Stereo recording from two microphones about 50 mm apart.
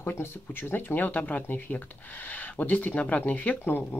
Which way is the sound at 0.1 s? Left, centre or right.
Left.